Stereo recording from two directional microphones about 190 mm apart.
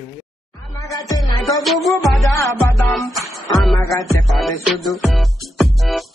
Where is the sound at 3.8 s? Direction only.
15° left (ahead or behind).